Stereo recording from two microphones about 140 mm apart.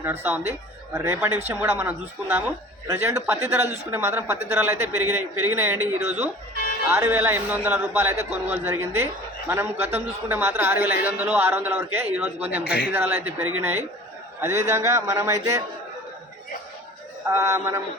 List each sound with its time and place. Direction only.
0.0 s a man's voice: 15° right (ahead or behind)
10.2 s a man's voice: 15° right (ahead or behind)
12.6 s speech: 90° left
12.9 s a man's voice: 15° right (ahead or behind)
17.2 s a man's voice: 20° right (ahead or behind)